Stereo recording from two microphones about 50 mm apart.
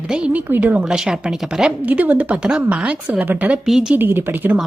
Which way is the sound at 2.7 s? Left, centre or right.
Right.